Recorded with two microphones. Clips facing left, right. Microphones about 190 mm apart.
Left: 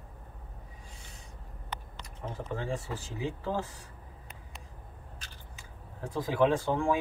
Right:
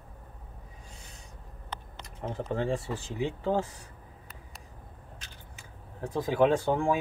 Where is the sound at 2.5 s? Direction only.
30° right (ahead or behind).